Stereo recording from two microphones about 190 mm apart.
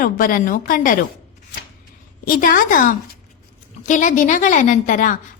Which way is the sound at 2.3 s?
45° left (ahead or behind).